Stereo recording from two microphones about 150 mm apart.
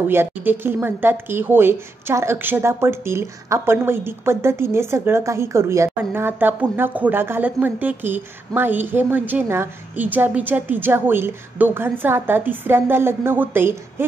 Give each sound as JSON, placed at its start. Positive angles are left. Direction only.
{"t": 0.1, "sound": "a woman's voice", "side_deg": -15}